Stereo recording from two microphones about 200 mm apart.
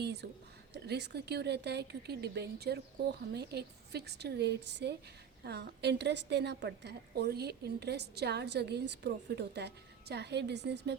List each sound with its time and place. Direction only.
0.0 s a woman's voice: 55° right (ahead or behind)